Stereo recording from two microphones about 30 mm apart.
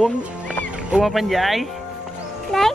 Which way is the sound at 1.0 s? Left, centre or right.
Centre.